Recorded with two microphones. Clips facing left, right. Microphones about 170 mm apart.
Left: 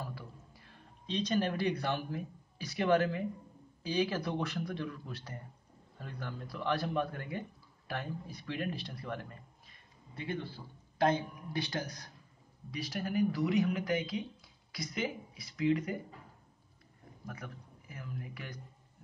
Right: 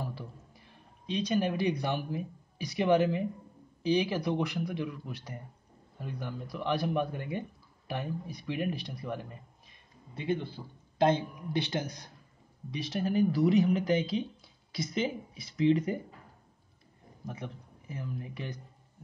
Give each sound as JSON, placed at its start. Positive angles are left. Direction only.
{"t": 0.1, "sound": "a sound", "side_deg": -20}
{"t": 3.8, "sound": "a man's voice", "side_deg": -15}
{"t": 17.3, "sound": "speech", "side_deg": -25}